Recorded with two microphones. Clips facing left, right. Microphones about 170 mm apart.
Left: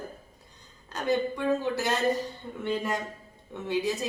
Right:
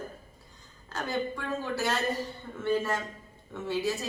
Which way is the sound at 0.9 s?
20° left (ahead or behind).